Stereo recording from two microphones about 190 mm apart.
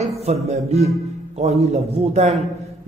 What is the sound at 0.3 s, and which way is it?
Speech, 35° right (ahead or behind).